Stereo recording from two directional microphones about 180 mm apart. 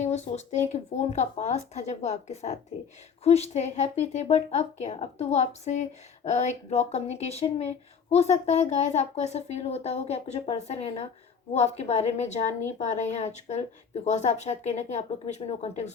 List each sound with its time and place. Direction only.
0.0 s speech: 40° left (ahead or behind)